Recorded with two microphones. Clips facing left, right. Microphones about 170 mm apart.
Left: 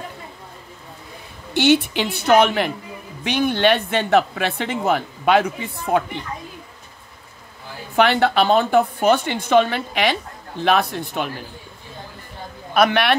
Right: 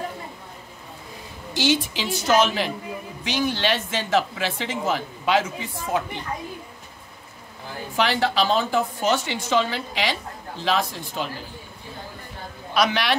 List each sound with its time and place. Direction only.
1.5 s speech: 60° left (ahead or behind)
7.9 s speech: 60° left (ahead or behind)
12.7 s speech: 55° left (ahead or behind)